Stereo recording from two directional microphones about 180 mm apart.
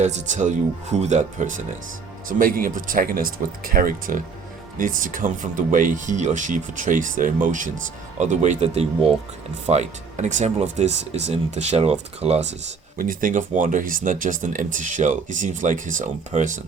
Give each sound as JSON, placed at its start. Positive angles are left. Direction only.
{"t": 0.0, "sound": "speech", "side_deg": -40}
{"t": 13.0, "sound": "speech", "side_deg": -50}